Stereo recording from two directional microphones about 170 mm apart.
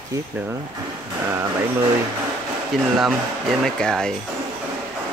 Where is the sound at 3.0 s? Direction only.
Centre (ahead or behind).